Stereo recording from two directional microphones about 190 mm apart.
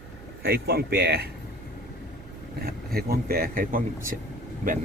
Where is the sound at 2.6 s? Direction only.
50° right (ahead or behind).